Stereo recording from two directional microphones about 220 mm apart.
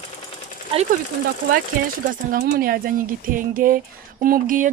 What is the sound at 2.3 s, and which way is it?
A woman's voice, 40° right (ahead or behind).